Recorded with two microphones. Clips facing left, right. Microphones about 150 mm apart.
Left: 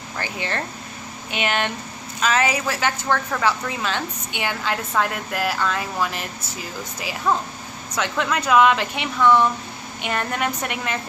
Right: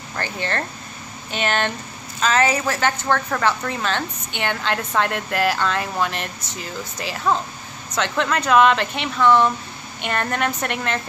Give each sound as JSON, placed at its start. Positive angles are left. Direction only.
{"t": 0.2, "sound": "a woman's voice", "side_deg": 10}